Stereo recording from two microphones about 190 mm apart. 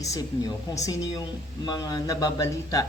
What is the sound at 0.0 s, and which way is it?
A woman's voice, 15° left (ahead or behind).